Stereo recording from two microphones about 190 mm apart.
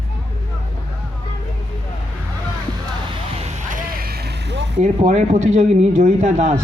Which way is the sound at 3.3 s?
40° right (ahead or behind).